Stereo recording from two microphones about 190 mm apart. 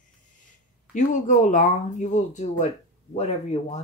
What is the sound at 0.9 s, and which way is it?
Speech, 40° left (ahead or behind).